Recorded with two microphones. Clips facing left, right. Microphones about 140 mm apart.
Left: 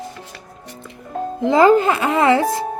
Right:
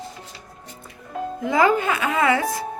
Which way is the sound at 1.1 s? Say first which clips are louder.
Left 6 dB; 30° left (ahead or behind).